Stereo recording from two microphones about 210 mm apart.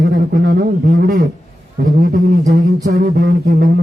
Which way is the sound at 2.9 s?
50° right (ahead or behind).